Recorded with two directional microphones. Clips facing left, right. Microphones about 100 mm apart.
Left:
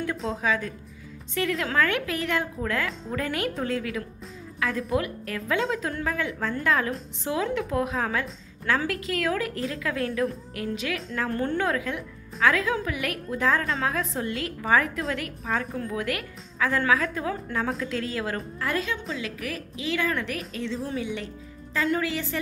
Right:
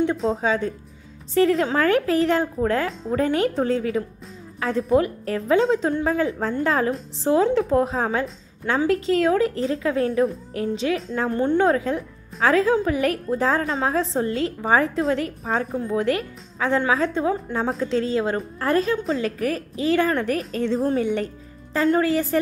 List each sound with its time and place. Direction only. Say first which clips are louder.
0.3 s a woman's voice: right 5 dB; 30° right (ahead or behind)